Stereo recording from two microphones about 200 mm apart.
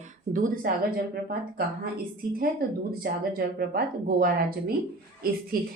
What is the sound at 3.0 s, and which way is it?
Speech, 50° right (ahead or behind).